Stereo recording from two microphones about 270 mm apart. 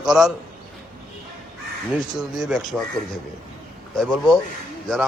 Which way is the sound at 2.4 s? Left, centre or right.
Centre.